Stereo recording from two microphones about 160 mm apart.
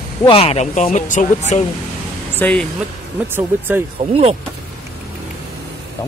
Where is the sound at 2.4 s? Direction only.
5° left (ahead or behind).